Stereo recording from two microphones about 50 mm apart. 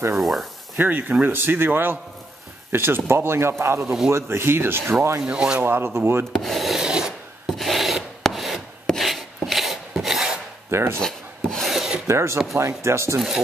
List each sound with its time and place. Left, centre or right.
0.2 s speech: centre
0.7 s a man's voice: right
3.8 s a man's voice: centre
4.1 s speech: right
5.3 s speech: centre
5.6 s speech: right
6.3 s rub: centre
6.8 s filing: centre
7.4 s rub: centre
8.3 s chopping: centre
10.7 s speech: right
11.0 s rub: centre
11.7 s filing: centre
12.1 s speech: right